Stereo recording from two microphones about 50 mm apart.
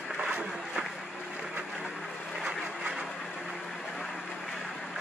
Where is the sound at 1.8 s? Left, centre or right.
Centre.